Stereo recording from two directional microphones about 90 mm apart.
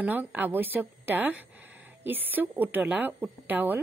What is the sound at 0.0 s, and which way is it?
A woman's voice, 20° right (ahead or behind).